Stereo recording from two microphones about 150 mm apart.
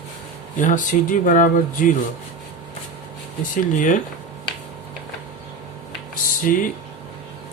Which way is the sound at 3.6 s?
60° left (ahead or behind).